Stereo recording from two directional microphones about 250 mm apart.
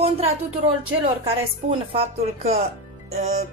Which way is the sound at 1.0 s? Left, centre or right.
Right.